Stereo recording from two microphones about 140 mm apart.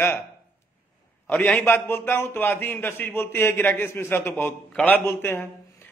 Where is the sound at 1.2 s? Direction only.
10° left (ahead or behind).